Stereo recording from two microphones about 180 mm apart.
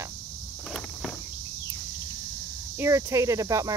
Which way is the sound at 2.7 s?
15° right (ahead or behind).